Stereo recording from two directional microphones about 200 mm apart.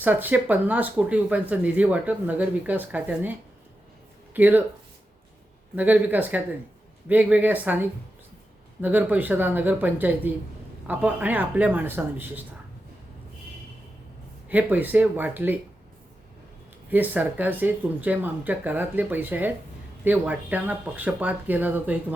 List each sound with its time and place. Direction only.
0.0 s speech: 10° right (ahead or behind)
4.4 s speech: 10° right (ahead or behind)
5.7 s speech: 10° right (ahead or behind)
14.5 s speech: 10° right (ahead or behind)
16.9 s speech: 10° right (ahead or behind)